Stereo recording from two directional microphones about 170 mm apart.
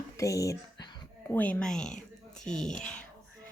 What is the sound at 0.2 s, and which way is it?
Speech, 20° left (ahead or behind).